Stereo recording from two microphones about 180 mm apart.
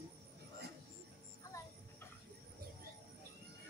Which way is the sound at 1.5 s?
20° left (ahead or behind).